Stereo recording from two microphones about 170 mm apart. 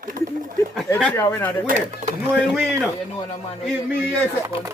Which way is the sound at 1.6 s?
50° right (ahead or behind).